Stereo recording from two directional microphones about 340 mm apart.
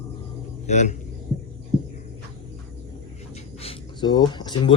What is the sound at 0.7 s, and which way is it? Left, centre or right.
Speech, centre.